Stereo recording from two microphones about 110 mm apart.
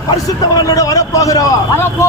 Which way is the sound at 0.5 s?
35° left (ahead or behind).